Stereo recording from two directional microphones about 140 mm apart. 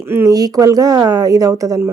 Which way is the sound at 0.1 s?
15° right (ahead or behind).